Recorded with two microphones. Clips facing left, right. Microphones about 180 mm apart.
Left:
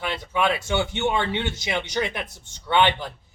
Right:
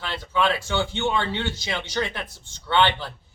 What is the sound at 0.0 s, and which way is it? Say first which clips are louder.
Speech: even; 15° left (ahead or behind).